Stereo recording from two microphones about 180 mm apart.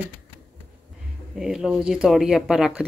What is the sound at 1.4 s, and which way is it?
Speech, 5° right (ahead or behind).